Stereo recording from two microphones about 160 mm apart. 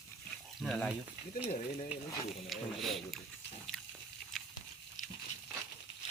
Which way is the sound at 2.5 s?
Centre (ahead or behind).